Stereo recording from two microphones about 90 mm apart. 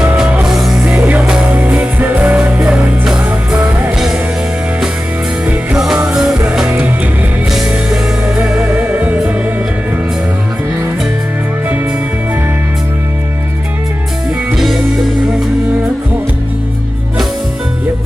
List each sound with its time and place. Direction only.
0.4 s music: 5° right (ahead or behind)
0.9 s music: 15° right (ahead or behind)
5.5 s music: 5° right (ahead or behind)
8.4 s music: 15° right (ahead or behind)
14.5 s music: centre (ahead or behind)